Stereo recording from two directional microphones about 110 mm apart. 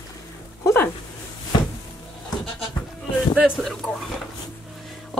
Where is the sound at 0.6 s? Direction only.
20° left (ahead or behind).